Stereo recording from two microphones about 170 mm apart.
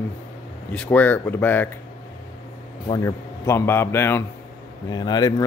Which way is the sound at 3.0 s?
15° left (ahead or behind).